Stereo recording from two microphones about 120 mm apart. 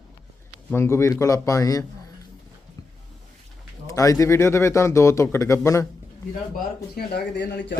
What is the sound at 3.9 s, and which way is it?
A man's voice, 25° left (ahead or behind).